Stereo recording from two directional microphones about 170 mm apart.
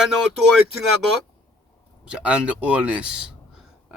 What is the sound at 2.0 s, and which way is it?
A man's voice, 5° right (ahead or behind).